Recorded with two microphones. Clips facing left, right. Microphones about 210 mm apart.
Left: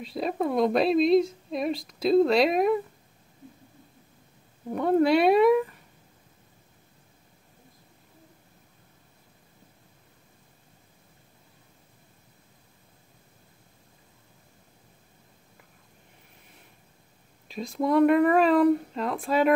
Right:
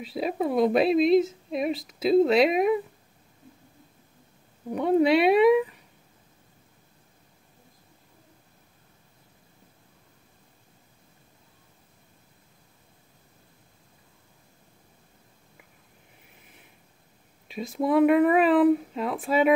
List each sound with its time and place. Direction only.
0.0 s speech: 5° right (ahead or behind)
4.7 s speech: centre (ahead or behind)
17.5 s speech: 5° right (ahead or behind)